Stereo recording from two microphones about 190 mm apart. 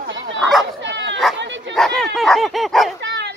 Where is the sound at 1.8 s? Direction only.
Centre (ahead or behind).